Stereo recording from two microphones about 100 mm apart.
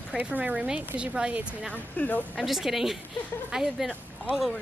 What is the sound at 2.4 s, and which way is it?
A woman's voice, 5° right (ahead or behind).